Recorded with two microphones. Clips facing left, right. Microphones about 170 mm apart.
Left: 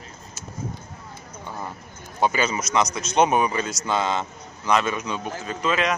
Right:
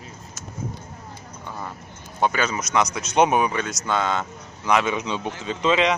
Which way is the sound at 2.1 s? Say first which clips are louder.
Even; 5° left (ahead or behind).